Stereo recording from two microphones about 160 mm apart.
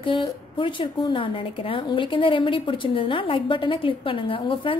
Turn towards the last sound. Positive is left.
turn(degrees=30)  # may be behind; listen again after turning